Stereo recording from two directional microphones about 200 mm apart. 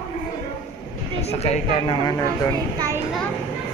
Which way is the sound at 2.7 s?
15° right (ahead or behind).